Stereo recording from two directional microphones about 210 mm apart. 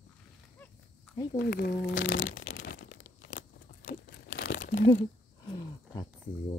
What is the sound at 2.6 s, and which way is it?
Crumpling, 45° left (ahead or behind).